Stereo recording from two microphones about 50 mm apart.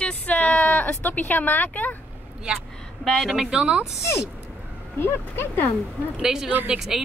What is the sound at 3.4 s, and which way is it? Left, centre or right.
Speech, centre.